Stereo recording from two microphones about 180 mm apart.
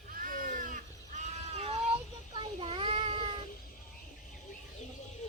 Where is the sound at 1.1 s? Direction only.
40° right (ahead or behind).